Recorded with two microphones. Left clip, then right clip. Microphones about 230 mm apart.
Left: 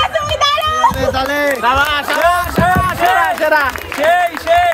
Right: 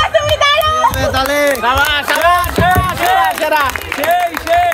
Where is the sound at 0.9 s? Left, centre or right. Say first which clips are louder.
Right 2 dB; centre.